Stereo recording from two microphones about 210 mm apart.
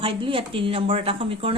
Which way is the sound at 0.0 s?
25° right (ahead or behind).